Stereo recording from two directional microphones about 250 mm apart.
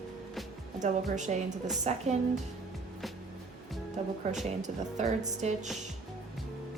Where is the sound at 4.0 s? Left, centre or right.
Right.